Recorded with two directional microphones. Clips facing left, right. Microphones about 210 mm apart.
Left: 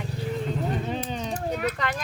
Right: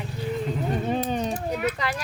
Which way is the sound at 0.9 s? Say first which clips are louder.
Right 5 dB; 50° right (ahead or behind).